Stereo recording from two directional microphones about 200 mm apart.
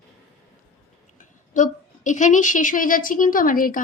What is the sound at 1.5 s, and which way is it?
A woman's voice, 40° left (ahead or behind).